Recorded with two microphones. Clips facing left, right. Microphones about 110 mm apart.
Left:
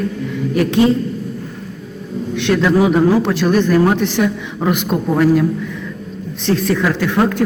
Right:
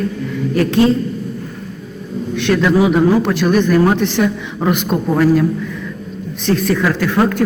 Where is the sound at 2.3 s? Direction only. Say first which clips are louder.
Right 1 dB; 20° left (ahead or behind).